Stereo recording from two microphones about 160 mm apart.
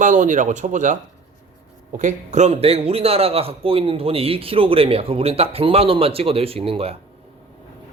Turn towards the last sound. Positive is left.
turn(degrees=-35)  # may be behind; listen again after turning